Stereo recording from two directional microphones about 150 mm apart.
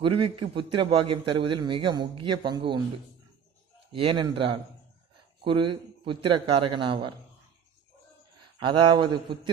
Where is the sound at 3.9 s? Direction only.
35° right (ahead or behind).